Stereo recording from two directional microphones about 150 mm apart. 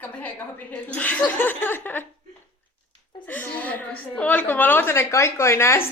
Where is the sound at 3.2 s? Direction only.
10° left (ahead or behind).